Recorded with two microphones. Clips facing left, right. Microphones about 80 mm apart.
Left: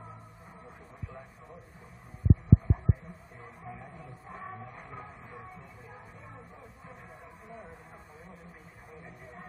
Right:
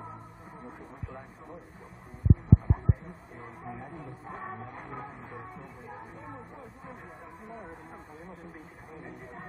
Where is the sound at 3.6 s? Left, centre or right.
Right.